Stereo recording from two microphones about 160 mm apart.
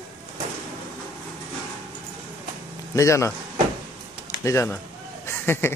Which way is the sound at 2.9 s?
20° left (ahead or behind).